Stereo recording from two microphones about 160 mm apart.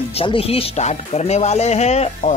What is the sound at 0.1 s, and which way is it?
Speech, 35° left (ahead or behind).